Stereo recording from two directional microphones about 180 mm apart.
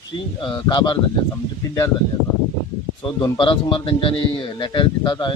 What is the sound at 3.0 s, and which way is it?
A man's voice, 25° left (ahead or behind).